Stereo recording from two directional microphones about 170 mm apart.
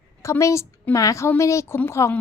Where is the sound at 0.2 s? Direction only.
15° left (ahead or behind).